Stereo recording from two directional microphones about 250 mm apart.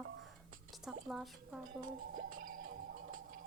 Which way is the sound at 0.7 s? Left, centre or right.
Centre.